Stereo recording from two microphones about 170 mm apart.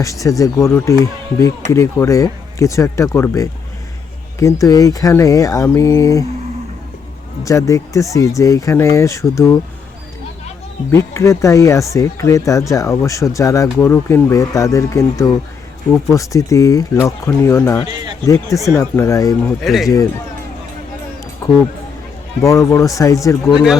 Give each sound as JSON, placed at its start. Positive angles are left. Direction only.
{"t": 0.0, "sound": "speech", "side_deg": 20}
{"t": 7.4, "sound": "speech", "side_deg": 20}
{"t": 10.9, "sound": "speech", "side_deg": 15}
{"t": 19.5, "sound": "a man's voice", "side_deg": 0}
{"t": 21.4, "sound": "a sound", "side_deg": 20}
{"t": 22.4, "sound": "speech", "side_deg": 15}